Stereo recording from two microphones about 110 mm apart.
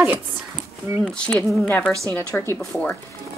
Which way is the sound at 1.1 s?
10° left (ahead or behind).